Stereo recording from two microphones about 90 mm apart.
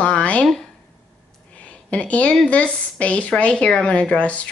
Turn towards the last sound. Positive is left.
turn(degrees=15)  # may be behind; listen again after turning